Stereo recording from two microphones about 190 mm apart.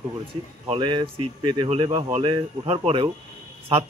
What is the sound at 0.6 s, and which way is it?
Speech, 25° right (ahead or behind).